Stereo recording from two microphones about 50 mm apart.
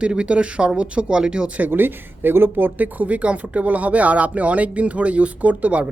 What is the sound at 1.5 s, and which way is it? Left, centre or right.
Speech, right.